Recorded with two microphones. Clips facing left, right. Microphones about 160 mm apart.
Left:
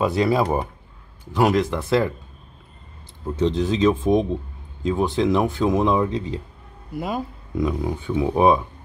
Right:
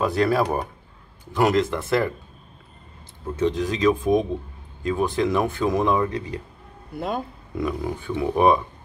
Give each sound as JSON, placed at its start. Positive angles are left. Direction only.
{"t": 0.0, "sound": "speech", "side_deg": 15}
{"t": 3.3, "sound": "speech", "side_deg": 20}
{"t": 7.0, "sound": "speech", "side_deg": 5}
{"t": 7.6, "sound": "speech", "side_deg": 15}